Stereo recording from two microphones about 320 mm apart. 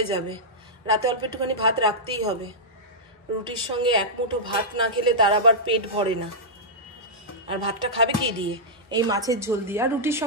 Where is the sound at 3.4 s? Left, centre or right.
Centre.